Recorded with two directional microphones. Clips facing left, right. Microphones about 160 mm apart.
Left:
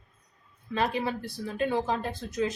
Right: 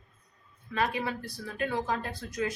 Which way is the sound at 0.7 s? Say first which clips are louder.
Left 2 dB; 30° left (ahead or behind).